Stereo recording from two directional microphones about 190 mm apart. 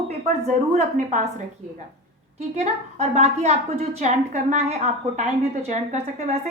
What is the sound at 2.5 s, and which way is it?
A woman's voice, 35° right (ahead or behind).